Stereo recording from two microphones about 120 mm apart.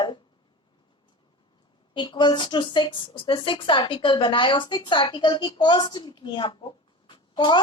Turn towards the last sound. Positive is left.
turn(degrees=40)  # may be behind; listen again after turning